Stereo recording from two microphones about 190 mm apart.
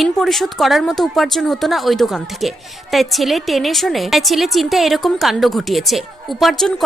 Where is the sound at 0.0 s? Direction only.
Centre (ahead or behind).